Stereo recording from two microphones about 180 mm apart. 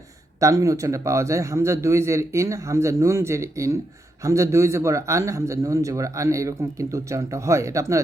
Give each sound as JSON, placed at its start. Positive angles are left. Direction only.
{"t": 0.3, "sound": "a man's voice", "side_deg": -15}